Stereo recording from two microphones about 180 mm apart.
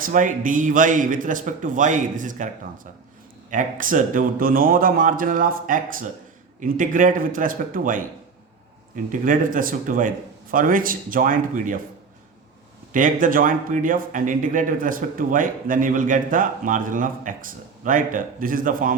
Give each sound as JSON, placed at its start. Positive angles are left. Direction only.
{"t": 0.0, "sound": "speech", "side_deg": -45}
{"t": 3.5, "sound": "speech", "side_deg": -50}
{"t": 9.2, "sound": "speech", "side_deg": -50}
{"t": 12.9, "sound": "speech", "side_deg": -45}